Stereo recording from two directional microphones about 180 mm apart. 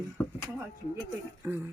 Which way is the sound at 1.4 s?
10° right (ahead or behind).